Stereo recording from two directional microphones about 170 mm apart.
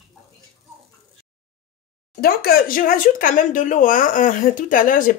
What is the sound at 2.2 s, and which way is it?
Speech, 60° left (ahead or behind).